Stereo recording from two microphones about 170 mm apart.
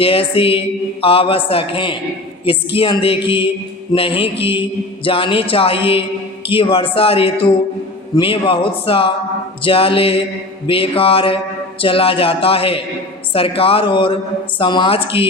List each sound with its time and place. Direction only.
0.0 s speech: 35° left (ahead or behind)